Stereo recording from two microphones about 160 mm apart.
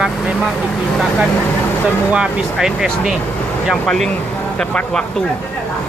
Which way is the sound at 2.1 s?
5° right (ahead or behind).